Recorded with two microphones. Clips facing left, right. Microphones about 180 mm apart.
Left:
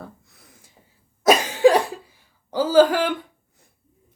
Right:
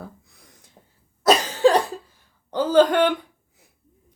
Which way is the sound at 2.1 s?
5° left (ahead or behind).